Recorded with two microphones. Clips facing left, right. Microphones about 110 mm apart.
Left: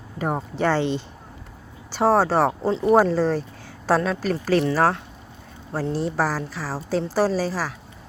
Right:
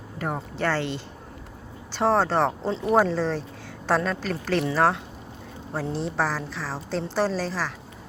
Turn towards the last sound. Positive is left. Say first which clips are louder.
# left 4 dB
turn(degrees=10)  # may be behind; listen again after turning